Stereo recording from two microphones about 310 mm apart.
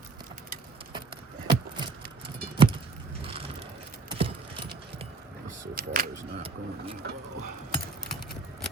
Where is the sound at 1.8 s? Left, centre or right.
Centre.